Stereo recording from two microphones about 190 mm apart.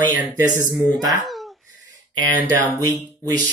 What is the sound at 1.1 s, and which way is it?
Speech, centre (ahead or behind).